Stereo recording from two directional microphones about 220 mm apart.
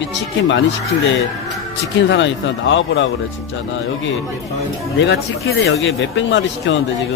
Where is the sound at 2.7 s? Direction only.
55° left (ahead or behind).